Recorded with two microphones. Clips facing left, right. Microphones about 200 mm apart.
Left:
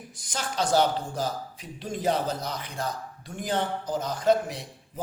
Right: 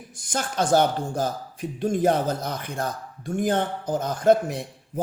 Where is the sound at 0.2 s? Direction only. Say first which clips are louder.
Right 4 dB; 50° right (ahead or behind).